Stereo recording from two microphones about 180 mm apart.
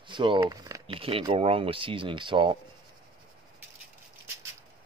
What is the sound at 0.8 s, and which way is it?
Speech, 30° right (ahead or behind).